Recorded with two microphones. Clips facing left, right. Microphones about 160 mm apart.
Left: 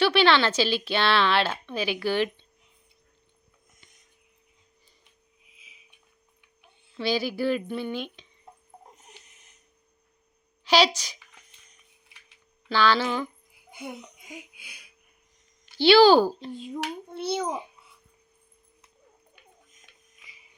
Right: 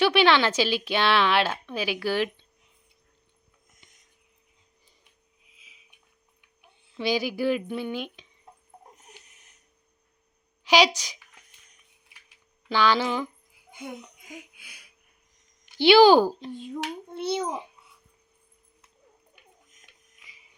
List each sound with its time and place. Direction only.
0.0 s speech: 15° right (ahead or behind)
6.6 s speech: 15° right (ahead or behind)
10.6 s a woman's voice: 15° right (ahead or behind)
12.6 s speech: 15° right (ahead or behind)
13.7 s a sound: 10° left (ahead or behind)
14.3 s music: 5° left (ahead or behind)
15.6 s a child's voice: 15° right (ahead or behind)
16.7 s a child's voice: 5° left (ahead or behind)